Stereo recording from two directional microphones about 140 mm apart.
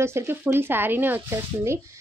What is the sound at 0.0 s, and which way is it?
A woman's voice, 15° right (ahead or behind).